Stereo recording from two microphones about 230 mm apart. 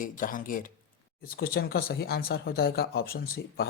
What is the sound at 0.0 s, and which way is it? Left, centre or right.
Speech, left.